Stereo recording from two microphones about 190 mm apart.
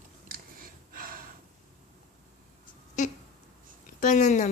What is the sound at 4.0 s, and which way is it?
Music, 40° left (ahead or behind).